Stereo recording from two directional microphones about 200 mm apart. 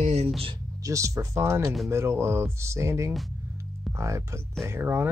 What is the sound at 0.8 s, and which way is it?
Speech, 15° right (ahead or behind).